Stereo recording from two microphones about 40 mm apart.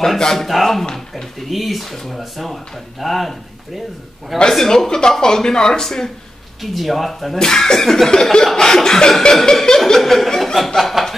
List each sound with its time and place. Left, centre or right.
0.0 s cough: centre
0.9 s speech: centre
4.5 s cough: centre
6.6 s speech: centre
7.3 s cough: centre
10.8 s chuckle: centre